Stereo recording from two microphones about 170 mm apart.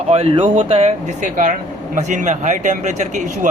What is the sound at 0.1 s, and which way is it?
Speech, 35° right (ahead or behind).